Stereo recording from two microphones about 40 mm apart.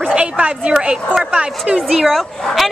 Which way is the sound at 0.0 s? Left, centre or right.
Right.